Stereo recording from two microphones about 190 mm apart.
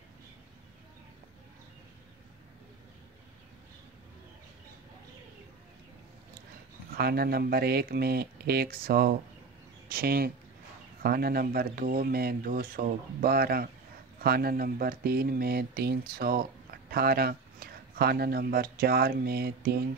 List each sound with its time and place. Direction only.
7.0 s speech: 55° right (ahead or behind)